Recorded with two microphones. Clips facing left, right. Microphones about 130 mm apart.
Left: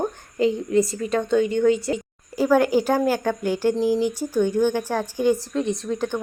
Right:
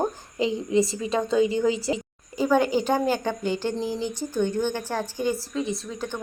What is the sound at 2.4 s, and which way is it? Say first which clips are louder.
Speech: left 3 dB; 10° left (ahead or behind).